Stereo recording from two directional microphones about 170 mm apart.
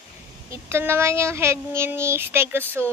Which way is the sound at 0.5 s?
15° right (ahead or behind).